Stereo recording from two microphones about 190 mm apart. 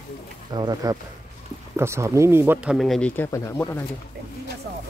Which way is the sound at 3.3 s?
15° left (ahead or behind).